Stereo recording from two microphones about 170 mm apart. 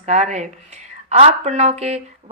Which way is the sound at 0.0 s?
40° right (ahead or behind).